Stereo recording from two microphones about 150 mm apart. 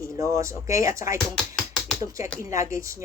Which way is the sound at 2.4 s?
20° right (ahead or behind).